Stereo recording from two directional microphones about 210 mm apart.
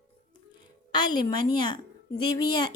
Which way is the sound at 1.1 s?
20° left (ahead or behind).